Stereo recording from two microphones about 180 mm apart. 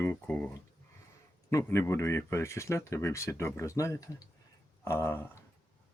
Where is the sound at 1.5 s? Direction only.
15° left (ahead or behind).